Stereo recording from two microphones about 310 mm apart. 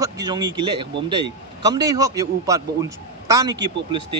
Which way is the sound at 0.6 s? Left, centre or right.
Centre.